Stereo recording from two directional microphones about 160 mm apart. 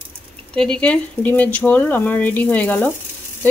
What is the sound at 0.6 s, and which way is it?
Speech, 5° left (ahead or behind).